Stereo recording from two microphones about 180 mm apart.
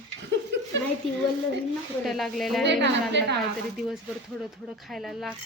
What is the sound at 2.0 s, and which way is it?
Speech, centre (ahead or behind).